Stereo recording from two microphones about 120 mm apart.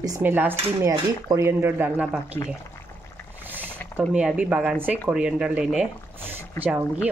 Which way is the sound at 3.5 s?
15° right (ahead or behind).